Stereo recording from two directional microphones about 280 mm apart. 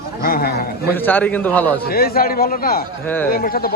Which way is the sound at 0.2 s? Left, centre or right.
Left.